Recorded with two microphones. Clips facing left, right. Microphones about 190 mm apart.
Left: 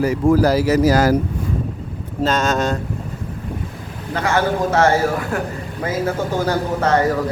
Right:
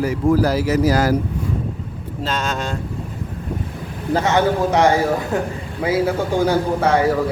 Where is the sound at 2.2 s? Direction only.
45° left (ahead or behind).